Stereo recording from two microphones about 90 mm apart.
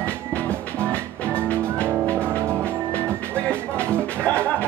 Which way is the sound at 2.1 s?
25° right (ahead or behind).